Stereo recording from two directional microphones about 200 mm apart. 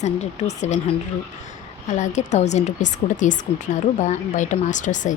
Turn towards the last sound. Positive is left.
turn(degrees=40)  # may be behind; listen again after turning